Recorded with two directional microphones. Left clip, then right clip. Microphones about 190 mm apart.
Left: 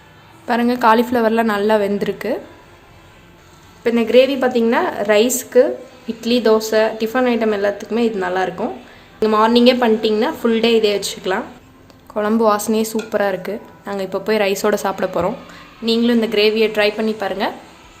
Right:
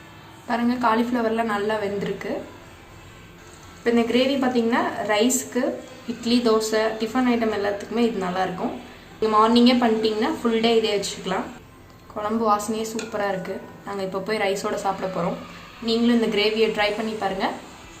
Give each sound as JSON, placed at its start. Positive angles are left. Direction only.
{"t": 0.4, "sound": "speech", "side_deg": 55}
{"t": 3.8, "sound": "speech", "side_deg": 55}